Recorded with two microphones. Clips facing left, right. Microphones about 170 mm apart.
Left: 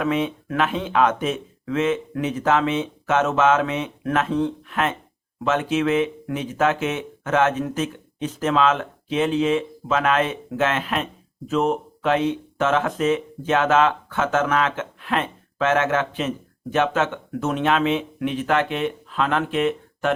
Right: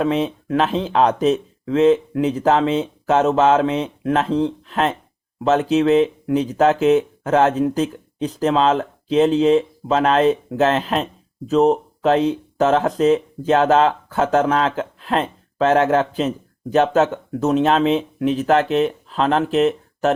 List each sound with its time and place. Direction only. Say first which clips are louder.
0.0 s speech: right 3 dB; 30° right (ahead or behind)